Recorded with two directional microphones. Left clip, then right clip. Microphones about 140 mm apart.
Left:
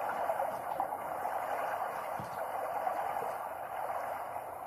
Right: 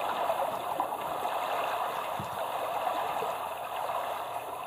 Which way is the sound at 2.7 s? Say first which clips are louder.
Right 3 dB; 45° right (ahead or behind).